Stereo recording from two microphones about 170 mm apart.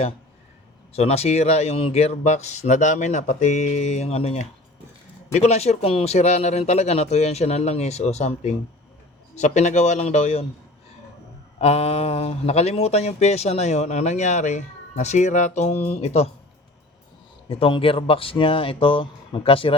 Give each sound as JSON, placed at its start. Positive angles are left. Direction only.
{"t": 0.9, "sound": "speech", "side_deg": 40}
{"t": 11.6, "sound": "speech", "side_deg": 35}
{"t": 17.5, "sound": "speech", "side_deg": 30}